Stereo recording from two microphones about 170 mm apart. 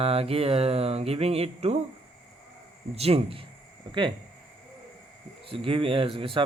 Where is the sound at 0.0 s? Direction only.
35° right (ahead or behind).